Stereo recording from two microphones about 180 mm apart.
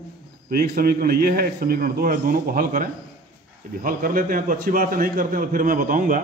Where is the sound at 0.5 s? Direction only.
55° right (ahead or behind).